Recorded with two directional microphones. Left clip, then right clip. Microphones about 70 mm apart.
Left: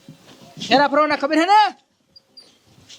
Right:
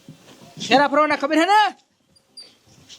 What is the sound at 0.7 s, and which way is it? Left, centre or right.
Speech, right.